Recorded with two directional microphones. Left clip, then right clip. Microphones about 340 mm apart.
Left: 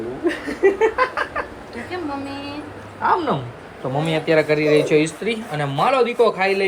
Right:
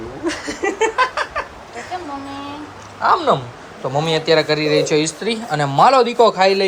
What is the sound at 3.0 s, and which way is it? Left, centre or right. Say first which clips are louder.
Speech: right 4 dB; centre.